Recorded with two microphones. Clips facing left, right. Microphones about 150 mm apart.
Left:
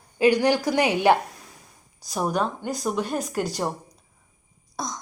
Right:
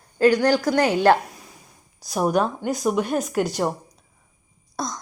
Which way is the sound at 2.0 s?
10° right (ahead or behind).